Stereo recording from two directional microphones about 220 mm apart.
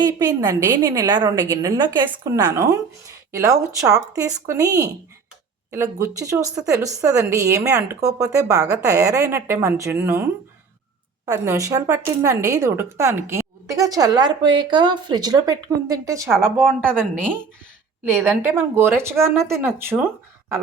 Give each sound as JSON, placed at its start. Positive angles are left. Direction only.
{"t": 0.0, "sound": "a woman's voice", "side_deg": -15}
{"t": 11.3, "sound": "a woman's voice", "side_deg": -15}
{"t": 18.2, "sound": "a woman's voice", "side_deg": -10}